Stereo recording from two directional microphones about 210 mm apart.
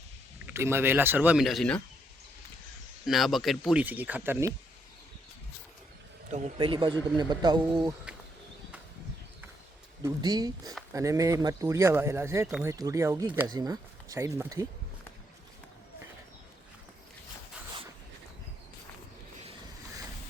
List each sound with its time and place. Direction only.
0.4 s speech: 10° right (ahead or behind)
3.1 s speech: centre (ahead or behind)
6.3 s speech: 30° right (ahead or behind)
10.0 s speech: 20° right (ahead or behind)